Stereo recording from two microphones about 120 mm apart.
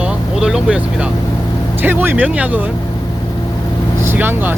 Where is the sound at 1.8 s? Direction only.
15° right (ahead or behind).